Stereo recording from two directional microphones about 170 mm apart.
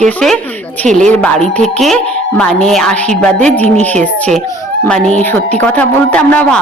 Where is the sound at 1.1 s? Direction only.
5° left (ahead or behind).